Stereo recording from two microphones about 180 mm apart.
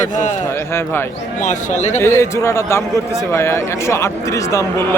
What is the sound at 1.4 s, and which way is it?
Speech, 40° left (ahead or behind).